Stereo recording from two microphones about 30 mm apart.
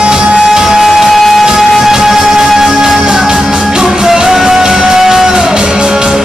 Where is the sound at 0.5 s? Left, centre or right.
Centre.